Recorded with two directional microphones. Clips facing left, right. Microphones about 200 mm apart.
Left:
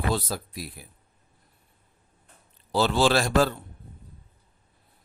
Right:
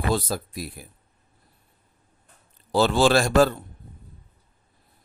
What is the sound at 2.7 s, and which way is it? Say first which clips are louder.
Speech: right 3 dB; 50° right (ahead or behind).